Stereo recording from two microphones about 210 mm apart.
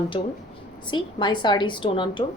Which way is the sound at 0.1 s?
25° left (ahead or behind).